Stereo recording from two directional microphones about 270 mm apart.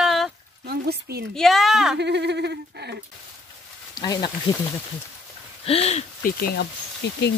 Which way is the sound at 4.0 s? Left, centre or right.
Centre.